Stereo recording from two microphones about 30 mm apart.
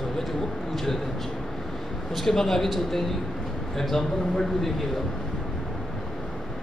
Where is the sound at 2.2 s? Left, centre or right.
Centre.